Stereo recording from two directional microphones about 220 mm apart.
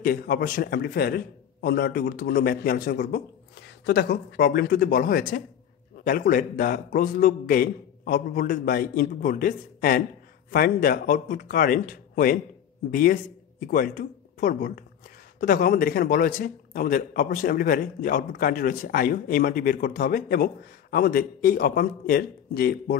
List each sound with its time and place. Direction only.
0.0 s a man's voice: 40° left (ahead or behind)